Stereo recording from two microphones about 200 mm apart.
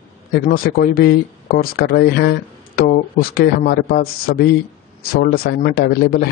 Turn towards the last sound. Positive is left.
turn(degrees=50)  # may be behind; listen again after turning